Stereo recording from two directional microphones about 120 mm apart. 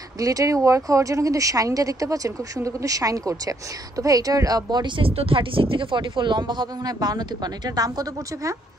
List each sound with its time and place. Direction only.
0.2 s speech: 30° right (ahead or behind)